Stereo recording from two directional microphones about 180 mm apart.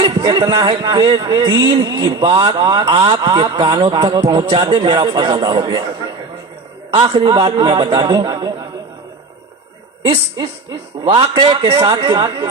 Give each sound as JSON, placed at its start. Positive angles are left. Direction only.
{"t": 0.0, "sound": "speech", "side_deg": -25}
{"t": 10.1, "sound": "speech", "side_deg": -30}